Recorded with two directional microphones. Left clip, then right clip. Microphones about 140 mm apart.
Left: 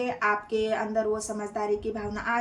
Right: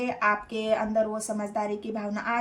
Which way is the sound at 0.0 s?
40° right (ahead or behind).